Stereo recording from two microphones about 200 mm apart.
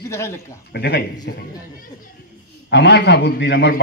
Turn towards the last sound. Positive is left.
turn(degrees=60)  # may be behind; listen again after turning